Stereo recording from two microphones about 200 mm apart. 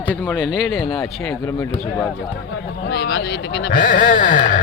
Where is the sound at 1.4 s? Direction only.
10° left (ahead or behind).